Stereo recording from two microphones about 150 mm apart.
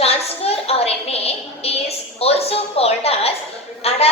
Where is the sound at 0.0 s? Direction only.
40° left (ahead or behind).